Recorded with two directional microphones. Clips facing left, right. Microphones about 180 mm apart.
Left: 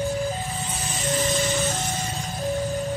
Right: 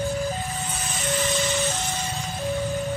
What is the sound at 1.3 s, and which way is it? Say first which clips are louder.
Ice cream truck: left 1 dB; 40° left (ahead or behind).